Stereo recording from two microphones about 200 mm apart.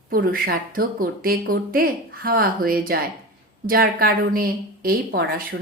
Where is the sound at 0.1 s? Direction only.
45° right (ahead or behind).